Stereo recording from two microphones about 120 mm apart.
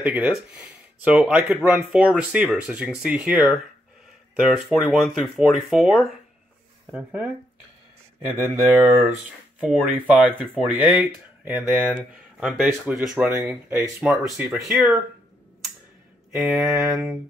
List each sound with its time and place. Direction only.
0.0 s speech: 10° right (ahead or behind)
8.7 s speech: 15° right (ahead or behind)
13.3 s speech: 15° right (ahead or behind)
16.3 s speech: centre (ahead or behind)